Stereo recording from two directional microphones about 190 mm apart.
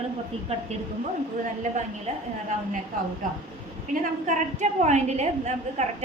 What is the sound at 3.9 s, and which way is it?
A woman's voice, 40° right (ahead or behind).